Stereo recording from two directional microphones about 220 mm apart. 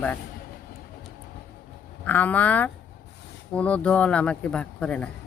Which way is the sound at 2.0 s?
5° left (ahead or behind).